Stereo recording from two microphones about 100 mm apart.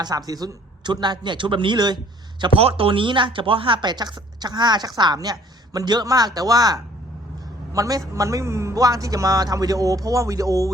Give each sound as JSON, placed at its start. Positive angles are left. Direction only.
{"t": 0.0, "sound": "speech", "side_deg": -40}
{"t": 2.6, "sound": "a man's voice", "side_deg": -70}